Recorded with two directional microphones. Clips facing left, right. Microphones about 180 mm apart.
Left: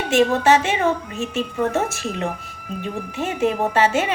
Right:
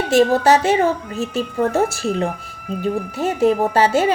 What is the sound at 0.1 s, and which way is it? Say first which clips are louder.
A woman's voice: right 2 dB; 35° right (ahead or behind).